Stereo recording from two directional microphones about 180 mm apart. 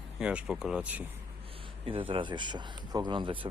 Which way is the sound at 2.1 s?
25° right (ahead or behind).